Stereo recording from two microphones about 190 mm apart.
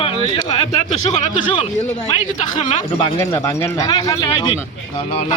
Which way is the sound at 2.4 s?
40° left (ahead or behind).